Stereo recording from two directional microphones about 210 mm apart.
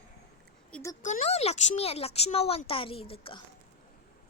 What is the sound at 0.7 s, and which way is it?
Speech, 5° left (ahead or behind).